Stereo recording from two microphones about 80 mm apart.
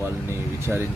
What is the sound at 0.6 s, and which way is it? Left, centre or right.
Speech, right.